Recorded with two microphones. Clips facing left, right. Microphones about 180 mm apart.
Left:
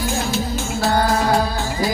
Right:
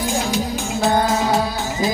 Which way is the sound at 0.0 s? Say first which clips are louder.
Right 1 dB; 15° right (ahead or behind).